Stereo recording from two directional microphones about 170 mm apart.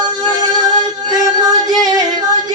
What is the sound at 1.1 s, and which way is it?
Music, 25° right (ahead or behind).